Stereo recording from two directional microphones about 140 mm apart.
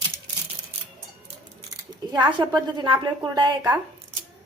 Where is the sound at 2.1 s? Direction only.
30° right (ahead or behind).